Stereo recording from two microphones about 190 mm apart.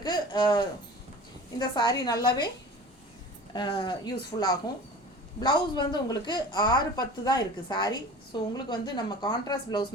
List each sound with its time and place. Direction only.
0.0 s a sound: 20° left (ahead or behind)
1.5 s a woman's voice: 20° left (ahead or behind)
3.5 s a woman's voice: 25° left (ahead or behind)